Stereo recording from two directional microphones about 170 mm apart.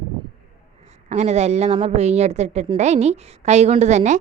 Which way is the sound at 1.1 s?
40° right (ahead or behind).